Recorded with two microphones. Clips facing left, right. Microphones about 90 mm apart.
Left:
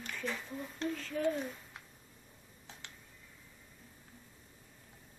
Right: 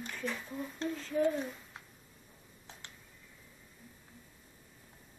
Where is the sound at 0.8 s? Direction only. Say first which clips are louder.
Left 1 dB; 25° right (ahead or behind).